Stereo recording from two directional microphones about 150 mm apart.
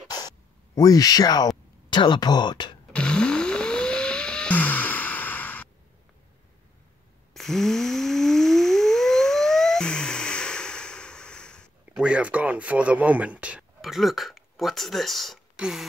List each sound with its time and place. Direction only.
0.7 s speech: 25° left (ahead or behind)
2.9 s music: 5° left (ahead or behind)
7.3 s a sound: centre (ahead or behind)
11.9 s speech: 5° right (ahead or behind)